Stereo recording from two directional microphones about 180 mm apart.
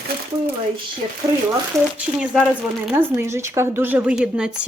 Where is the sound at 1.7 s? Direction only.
15° right (ahead or behind).